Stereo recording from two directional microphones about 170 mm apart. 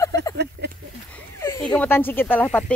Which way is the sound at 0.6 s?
75° right (ahead or behind).